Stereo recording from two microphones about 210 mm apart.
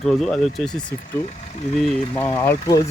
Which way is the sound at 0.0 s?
Centre (ahead or behind).